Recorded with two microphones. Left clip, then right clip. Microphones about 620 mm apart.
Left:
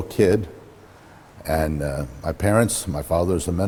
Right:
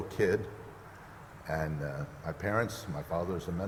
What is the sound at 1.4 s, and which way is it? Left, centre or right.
A man's voice, left.